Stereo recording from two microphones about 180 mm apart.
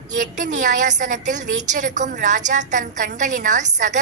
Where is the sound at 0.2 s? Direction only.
45° right (ahead or behind).